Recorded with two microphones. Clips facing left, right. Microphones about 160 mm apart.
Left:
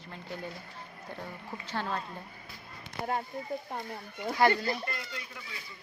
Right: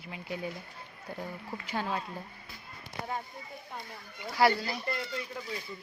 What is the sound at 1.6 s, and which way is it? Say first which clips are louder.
Speech: right 1 dB; 10° right (ahead or behind).